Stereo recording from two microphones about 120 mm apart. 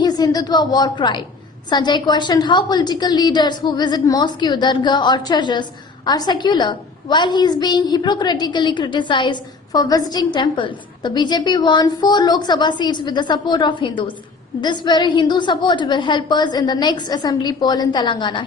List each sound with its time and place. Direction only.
0.0 s a woman's voice: 35° left (ahead or behind)